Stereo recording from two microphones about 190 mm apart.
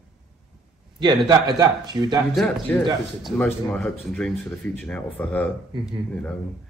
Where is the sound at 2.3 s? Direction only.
5° left (ahead or behind).